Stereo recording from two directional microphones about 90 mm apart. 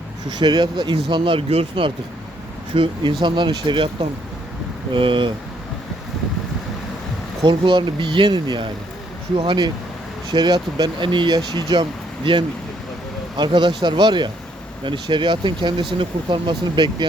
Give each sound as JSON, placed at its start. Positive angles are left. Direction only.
{"t": 0.3, "sound": "speech", "side_deg": -55}
{"t": 2.7, "sound": "speech", "side_deg": -70}
{"t": 4.9, "sound": "speech", "side_deg": -70}
{"t": 7.4, "sound": "speech", "side_deg": -60}